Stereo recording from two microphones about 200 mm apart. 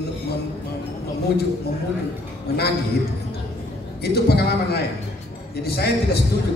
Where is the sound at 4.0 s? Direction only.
55° left (ahead or behind).